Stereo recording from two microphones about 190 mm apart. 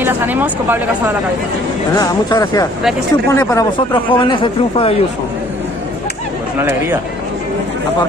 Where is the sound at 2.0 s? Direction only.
20° left (ahead or behind).